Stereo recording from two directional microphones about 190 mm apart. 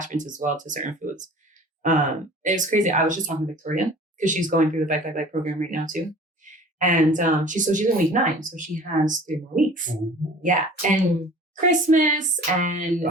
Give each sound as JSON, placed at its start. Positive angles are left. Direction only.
{"t": 0.0, "sound": "speech", "side_deg": -40}